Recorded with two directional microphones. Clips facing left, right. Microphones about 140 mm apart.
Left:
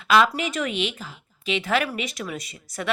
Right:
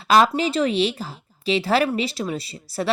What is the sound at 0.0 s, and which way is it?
A woman's voice, 35° right (ahead or behind).